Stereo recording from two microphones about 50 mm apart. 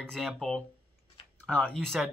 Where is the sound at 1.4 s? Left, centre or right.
Left.